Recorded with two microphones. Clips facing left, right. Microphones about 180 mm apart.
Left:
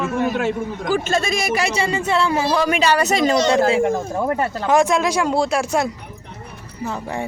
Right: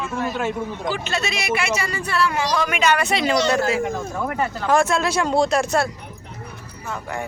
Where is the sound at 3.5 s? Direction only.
25° left (ahead or behind).